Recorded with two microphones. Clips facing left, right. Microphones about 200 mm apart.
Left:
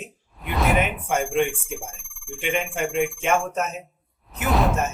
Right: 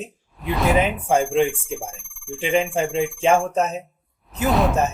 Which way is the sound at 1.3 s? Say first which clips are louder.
Right 3 dB; centre (ahead or behind).